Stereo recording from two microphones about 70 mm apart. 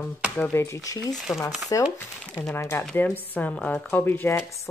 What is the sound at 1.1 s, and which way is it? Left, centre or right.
Speech, centre.